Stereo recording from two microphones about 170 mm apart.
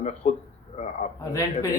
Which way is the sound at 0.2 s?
40° left (ahead or behind).